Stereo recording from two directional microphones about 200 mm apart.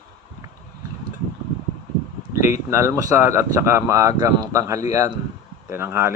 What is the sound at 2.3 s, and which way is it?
Speech, 15° right (ahead or behind).